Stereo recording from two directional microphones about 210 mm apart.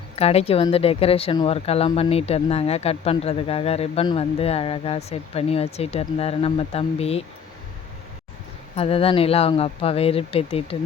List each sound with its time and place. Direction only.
0.2 s speech: 30° left (ahead or behind)
8.7 s speech: 30° left (ahead or behind)